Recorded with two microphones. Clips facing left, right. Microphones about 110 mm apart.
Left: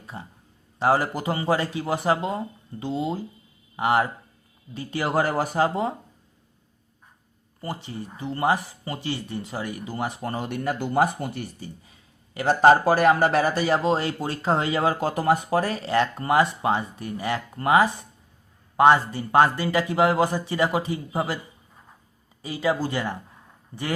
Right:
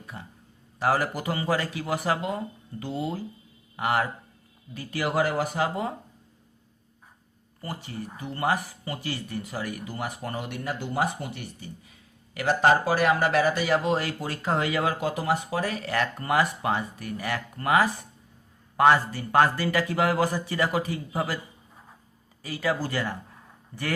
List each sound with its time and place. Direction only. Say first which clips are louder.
0.1 s speech: left 3 dB; 30° left (ahead or behind)
5.1 s speech: left 3 dB; 40° left (ahead or behind)
7.6 s speech: left 3 dB; 25° left (ahead or behind)
10.5 s speech: left 9 dB; 50° left (ahead or behind); by 12.7 s 30° left (ahead or behind)
12.8 s speech: left 4 dB; 40° left (ahead or behind)
15.1 s speech: left 5 dB; 50° left (ahead or behind)
15.8 s speech: left 5 dB; 25° left (ahead or behind)
22.4 s speech: left 3 dB; 20° left (ahead or behind)